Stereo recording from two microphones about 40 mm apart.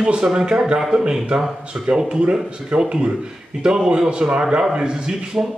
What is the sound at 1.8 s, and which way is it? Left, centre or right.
Speech, right.